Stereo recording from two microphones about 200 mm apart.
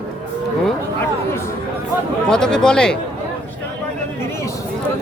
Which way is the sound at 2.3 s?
5° left (ahead or behind).